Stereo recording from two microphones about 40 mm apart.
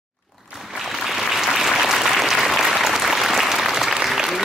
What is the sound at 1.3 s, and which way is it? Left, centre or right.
Applause, centre.